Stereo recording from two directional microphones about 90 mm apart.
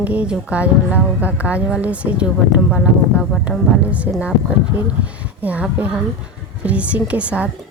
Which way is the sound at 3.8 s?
15° right (ahead or behind).